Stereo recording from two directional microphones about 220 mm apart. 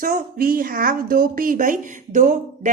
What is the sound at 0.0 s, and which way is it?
A woman's voice, 40° right (ahead or behind).